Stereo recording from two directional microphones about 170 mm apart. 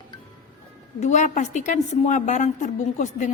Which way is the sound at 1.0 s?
45° left (ahead or behind).